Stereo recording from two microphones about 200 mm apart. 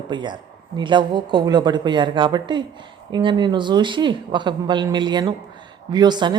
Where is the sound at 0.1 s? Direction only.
20° right (ahead or behind).